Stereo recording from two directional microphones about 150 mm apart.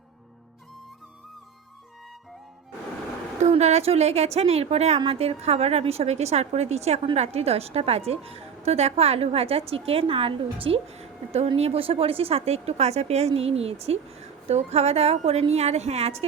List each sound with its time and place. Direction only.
3.4 s a woman's voice: 45° right (ahead or behind)